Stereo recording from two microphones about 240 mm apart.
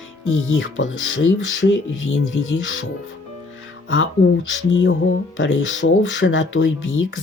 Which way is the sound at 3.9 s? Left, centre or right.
Left.